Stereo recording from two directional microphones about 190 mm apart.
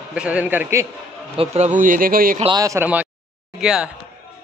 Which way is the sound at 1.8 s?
45° right (ahead or behind).